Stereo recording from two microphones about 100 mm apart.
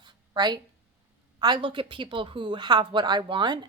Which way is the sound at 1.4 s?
50° right (ahead or behind).